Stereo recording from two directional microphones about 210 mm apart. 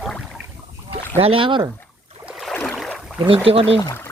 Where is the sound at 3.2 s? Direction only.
25° right (ahead or behind).